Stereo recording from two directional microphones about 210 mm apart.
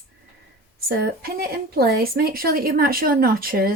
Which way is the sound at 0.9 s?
45° right (ahead or behind).